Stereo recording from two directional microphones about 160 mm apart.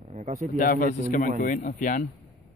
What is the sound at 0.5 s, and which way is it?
Speech, 60° left (ahead or behind).